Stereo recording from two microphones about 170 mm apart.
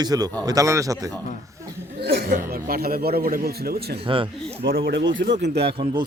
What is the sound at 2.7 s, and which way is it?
Speech, 60° right (ahead or behind).